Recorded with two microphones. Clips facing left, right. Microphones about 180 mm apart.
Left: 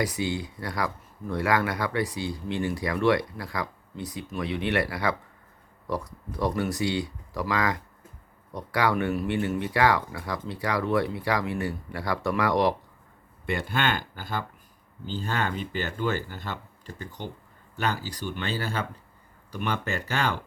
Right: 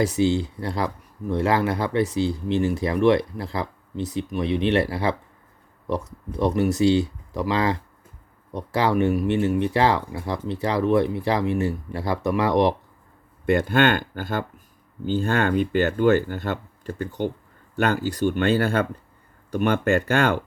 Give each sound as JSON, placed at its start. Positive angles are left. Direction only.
{"t": 0.0, "sound": "speech", "side_deg": -25}
{"t": 13.4, "sound": "speech", "side_deg": -50}